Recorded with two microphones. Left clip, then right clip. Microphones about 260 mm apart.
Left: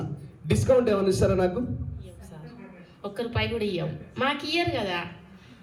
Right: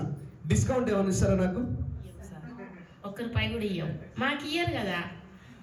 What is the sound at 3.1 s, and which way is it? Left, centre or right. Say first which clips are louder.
Speech: left 4 dB; centre.